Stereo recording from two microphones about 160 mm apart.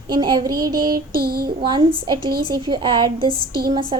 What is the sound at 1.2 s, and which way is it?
Child singing, 70° right (ahead or behind).